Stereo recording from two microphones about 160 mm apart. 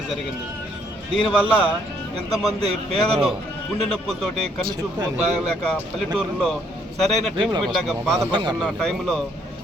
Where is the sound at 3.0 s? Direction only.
Centre (ahead or behind).